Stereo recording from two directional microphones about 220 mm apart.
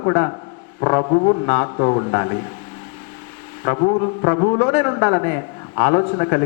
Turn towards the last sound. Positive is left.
turn(degrees=20)  # may be behind; listen again after turning